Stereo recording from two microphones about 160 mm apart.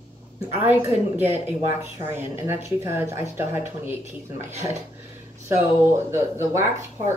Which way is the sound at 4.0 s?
45° right (ahead or behind).